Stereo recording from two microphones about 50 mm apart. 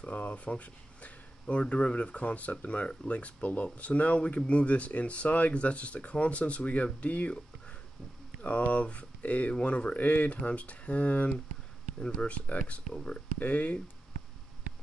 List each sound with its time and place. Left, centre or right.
0.0 s speech: left